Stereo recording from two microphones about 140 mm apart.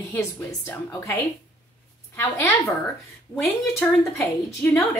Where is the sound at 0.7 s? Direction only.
20° left (ahead or behind).